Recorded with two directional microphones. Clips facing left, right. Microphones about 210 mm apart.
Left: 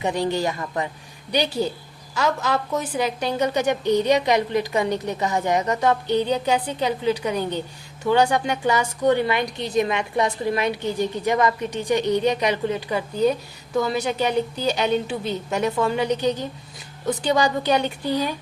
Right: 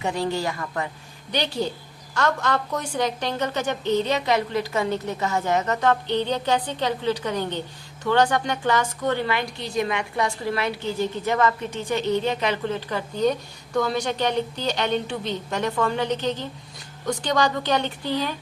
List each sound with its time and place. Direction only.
0.0 s a woman's voice: 20° left (ahead or behind)
1.3 s a woman's voice: 10° left (ahead or behind)